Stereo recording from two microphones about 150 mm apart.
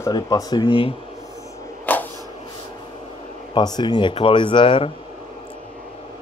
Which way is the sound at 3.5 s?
30° left (ahead or behind).